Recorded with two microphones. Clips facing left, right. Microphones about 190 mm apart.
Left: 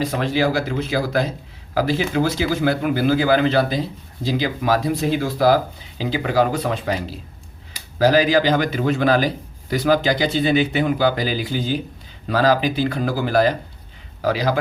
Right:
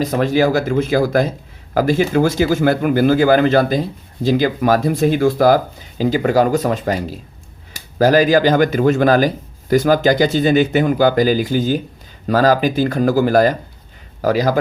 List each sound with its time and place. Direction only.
0.0 s speech: 45° right (ahead or behind)